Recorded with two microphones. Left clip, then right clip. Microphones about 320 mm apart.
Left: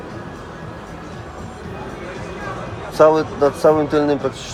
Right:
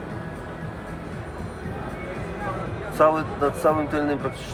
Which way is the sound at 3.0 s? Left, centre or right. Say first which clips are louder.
Left 7 dB; left.